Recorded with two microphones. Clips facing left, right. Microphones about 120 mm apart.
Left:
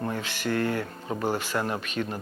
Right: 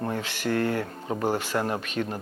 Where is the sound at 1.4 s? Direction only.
40° right (ahead or behind).